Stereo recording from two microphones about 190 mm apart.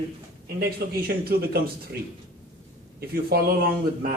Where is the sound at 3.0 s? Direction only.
55° right (ahead or behind).